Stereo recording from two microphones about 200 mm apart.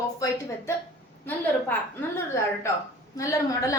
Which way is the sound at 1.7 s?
10° left (ahead or behind).